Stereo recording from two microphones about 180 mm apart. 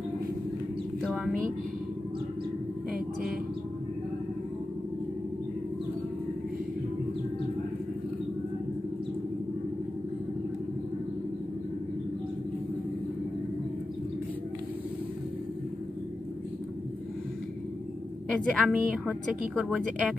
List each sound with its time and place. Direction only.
1.0 s a woman's voice: 5° right (ahead or behind)
2.9 s a sound: centre (ahead or behind)
18.3 s speech: 5° left (ahead or behind)